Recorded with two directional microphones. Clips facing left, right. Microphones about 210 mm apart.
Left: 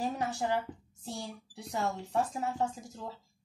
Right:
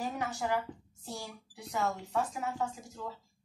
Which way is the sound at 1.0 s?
30° left (ahead or behind).